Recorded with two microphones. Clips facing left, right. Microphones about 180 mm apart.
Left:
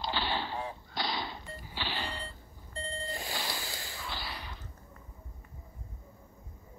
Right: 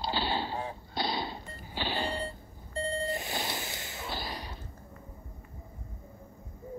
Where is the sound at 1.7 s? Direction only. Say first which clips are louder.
Right 6 dB; 45° right (ahead or behind).